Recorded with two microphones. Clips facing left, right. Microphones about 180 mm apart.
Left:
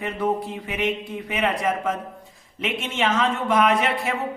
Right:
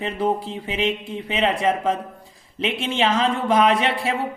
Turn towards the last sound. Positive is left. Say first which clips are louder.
# right 1 dB
turn(degrees=-30)  # may be behind; listen again after turning